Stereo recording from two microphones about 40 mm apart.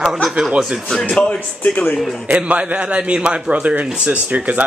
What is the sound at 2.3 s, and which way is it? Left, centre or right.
A man's voice, right.